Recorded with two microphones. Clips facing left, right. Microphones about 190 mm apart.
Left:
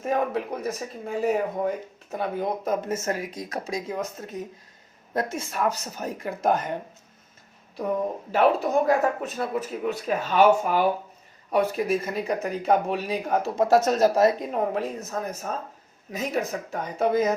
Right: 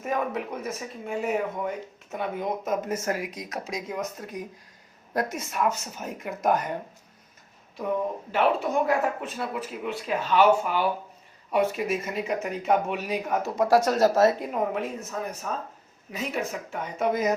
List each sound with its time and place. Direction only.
0.0 s speech: 30° left (ahead or behind)
8.3 s speech: 40° left (ahead or behind); by 14.4 s 15° left (ahead or behind)
14.5 s speech: 35° left (ahead or behind)